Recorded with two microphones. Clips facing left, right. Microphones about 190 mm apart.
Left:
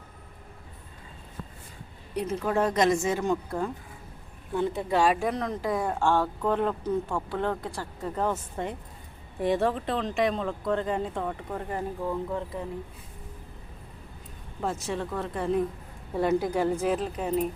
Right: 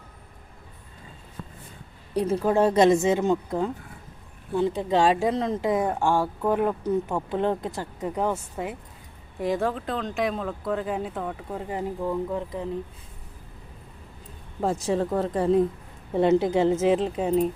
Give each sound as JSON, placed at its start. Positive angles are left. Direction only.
{"t": 2.1, "sound": "speech", "side_deg": -35}
{"t": 11.5, "sound": "speech", "side_deg": -15}
{"t": 14.6, "sound": "speech", "side_deg": -35}
{"t": 16.1, "sound": "speech", "side_deg": -25}